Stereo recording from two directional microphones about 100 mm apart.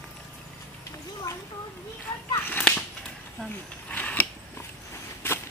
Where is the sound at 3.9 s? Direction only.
15° left (ahead or behind).